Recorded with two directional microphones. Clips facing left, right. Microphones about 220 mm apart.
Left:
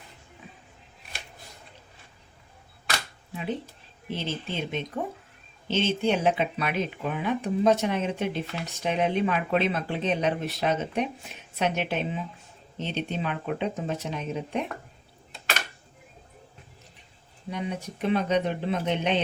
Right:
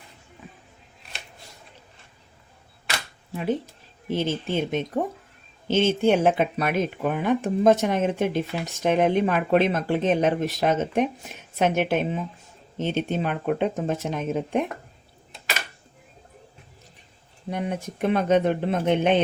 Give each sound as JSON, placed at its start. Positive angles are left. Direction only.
{"t": 4.1, "sound": "speech", "side_deg": -50}
{"t": 17.5, "sound": "speech", "side_deg": -50}